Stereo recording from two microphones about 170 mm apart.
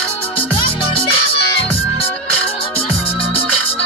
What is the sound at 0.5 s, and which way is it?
Music, 30° left (ahead or behind).